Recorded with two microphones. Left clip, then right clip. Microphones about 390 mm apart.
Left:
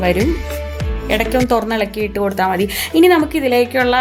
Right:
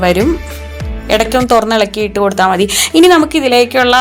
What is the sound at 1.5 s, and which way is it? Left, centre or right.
Speech, left.